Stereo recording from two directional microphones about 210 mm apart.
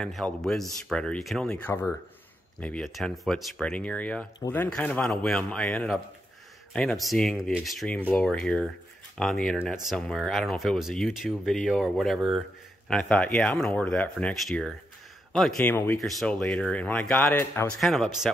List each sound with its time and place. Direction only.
0.0 s speech: centre (ahead or behind)